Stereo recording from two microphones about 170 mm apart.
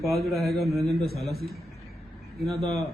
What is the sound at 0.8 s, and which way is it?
Speech, 35° left (ahead or behind).